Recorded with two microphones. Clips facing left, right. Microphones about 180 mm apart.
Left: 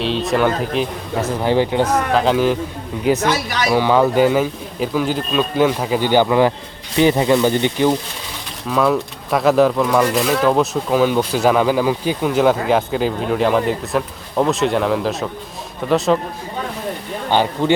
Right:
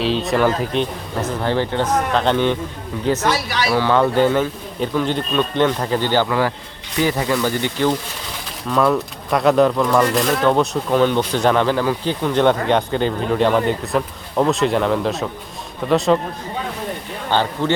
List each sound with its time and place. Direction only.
0.0 s speech: centre (ahead or behind)
3.2 s speech: 45° left (ahead or behind)
3.7 s speech: 15° left (ahead or behind)
8.7 s speech: centre (ahead or behind)
17.3 s speech: 15° left (ahead or behind)